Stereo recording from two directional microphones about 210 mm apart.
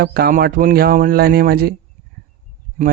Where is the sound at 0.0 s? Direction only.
45° right (ahead or behind).